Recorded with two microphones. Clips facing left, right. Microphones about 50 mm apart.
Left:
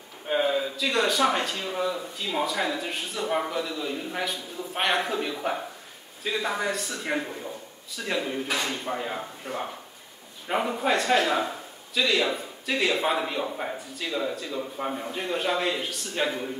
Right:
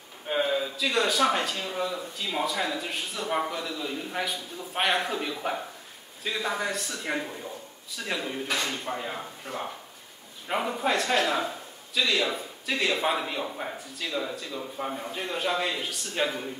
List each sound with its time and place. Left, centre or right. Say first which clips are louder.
0.3 s speech: left 2 dB; centre